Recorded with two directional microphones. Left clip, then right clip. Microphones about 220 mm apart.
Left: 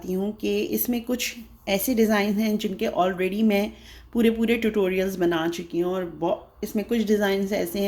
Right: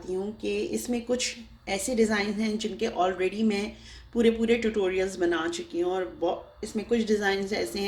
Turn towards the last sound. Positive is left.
turn(degrees=40)  # may be behind; listen again after turning